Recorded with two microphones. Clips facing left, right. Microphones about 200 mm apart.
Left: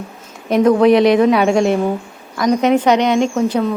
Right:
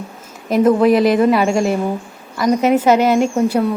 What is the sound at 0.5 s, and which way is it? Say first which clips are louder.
Speech: left 1 dB; 5° right (ahead or behind).